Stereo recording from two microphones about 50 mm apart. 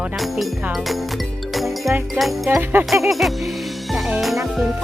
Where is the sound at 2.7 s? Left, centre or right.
Right.